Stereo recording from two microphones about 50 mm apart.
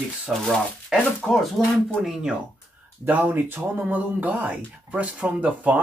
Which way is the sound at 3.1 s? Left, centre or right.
Right.